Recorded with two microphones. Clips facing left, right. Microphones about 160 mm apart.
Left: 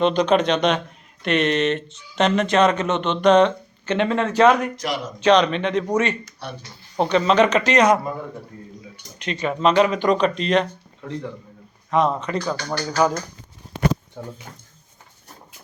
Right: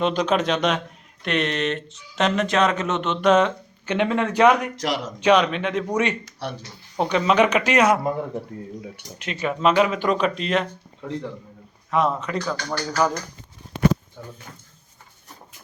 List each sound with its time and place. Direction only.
0.0 s speech: 5° right (ahead or behind)
4.8 s speech: 90° right
5.2 s speech: 10° right (ahead or behind)
9.1 s speech: 5° right (ahead or behind)
11.9 s speech: 5° right (ahead or behind)
12.6 s speech: 25° left (ahead or behind)
14.2 s speech: 60° left (ahead or behind)